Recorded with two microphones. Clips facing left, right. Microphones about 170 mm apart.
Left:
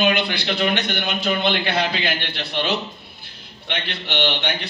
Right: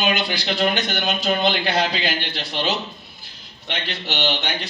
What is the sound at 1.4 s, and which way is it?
A man's voice, 60° left (ahead or behind).